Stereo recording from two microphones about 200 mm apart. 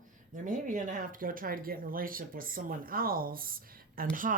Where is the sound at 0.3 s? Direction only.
40° right (ahead or behind).